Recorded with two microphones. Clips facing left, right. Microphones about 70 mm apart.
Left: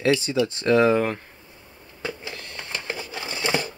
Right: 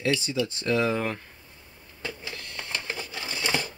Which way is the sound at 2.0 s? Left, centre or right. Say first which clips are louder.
Left 4 dB; left.